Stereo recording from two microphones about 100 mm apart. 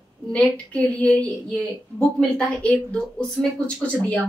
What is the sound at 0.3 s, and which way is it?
A woman's voice, 10° left (ahead or behind).